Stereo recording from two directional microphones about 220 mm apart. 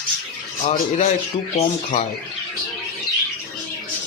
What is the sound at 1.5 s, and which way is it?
Speech, 30° left (ahead or behind).